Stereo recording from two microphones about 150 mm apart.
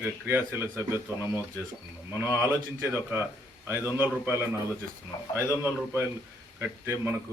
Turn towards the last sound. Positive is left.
turn(degrees=-15)  # may be behind; listen again after turning